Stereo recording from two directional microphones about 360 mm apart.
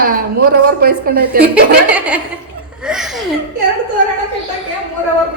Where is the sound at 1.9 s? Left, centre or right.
Centre.